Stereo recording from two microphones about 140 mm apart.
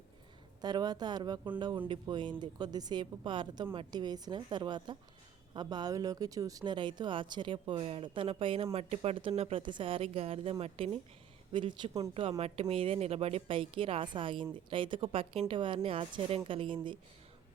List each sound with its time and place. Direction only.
0.6 s speech: 30° right (ahead or behind); by 10.9 s 45° right (ahead or behind)
11.5 s speech: 35° right (ahead or behind)